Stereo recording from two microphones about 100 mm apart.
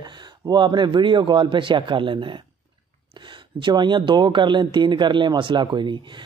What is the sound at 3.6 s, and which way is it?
A man's voice, 50° right (ahead or behind).